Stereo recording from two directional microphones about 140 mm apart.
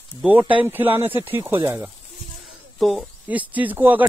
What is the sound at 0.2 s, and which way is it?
Speech, 10° right (ahead or behind).